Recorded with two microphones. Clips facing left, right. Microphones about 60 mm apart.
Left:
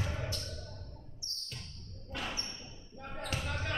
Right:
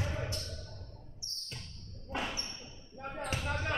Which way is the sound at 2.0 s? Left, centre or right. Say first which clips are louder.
Right 3 dB; right.